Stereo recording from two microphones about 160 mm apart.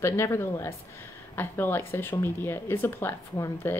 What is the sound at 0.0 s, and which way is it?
Speech, 15° left (ahead or behind).